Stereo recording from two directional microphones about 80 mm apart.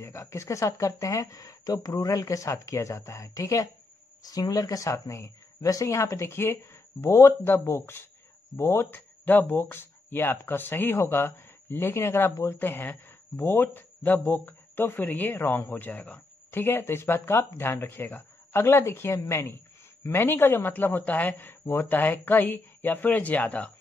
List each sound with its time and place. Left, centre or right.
0.0 s speech: left; by 23.7 s centre